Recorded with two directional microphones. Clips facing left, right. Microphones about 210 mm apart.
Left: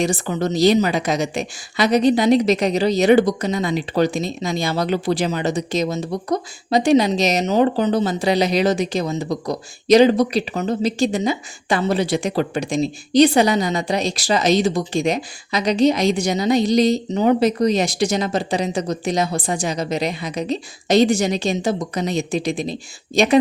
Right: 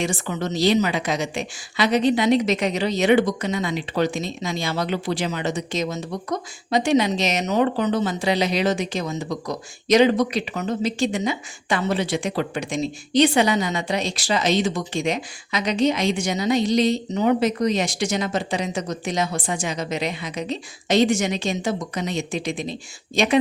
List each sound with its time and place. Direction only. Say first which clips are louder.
0.0 s speech: left 5 dB; 40° left (ahead or behind)